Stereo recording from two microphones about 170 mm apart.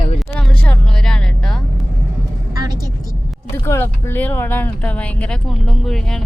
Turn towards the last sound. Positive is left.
turn(degrees=5)  # may be behind; listen again after turning